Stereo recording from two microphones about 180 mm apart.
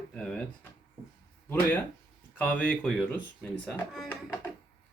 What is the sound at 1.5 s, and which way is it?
Speech, 10° left (ahead or behind).